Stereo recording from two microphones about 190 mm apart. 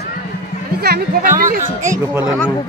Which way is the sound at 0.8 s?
55° right (ahead or behind).